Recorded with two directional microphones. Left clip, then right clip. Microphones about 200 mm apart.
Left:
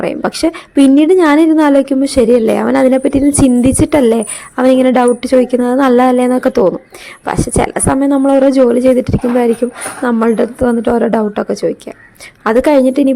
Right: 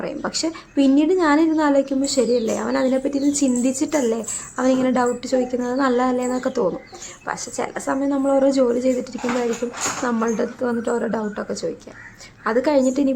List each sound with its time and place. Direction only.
0.0 s a woman's voice: 40° left (ahead or behind)